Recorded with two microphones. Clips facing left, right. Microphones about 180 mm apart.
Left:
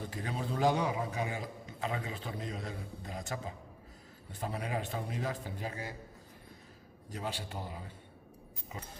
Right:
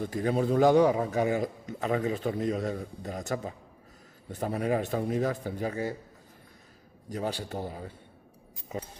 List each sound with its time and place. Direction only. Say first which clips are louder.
0.1 s a man's voice: right 14 dB; 45° right (ahead or behind)
7.1 s a man's voice: right 7 dB; 45° right (ahead or behind)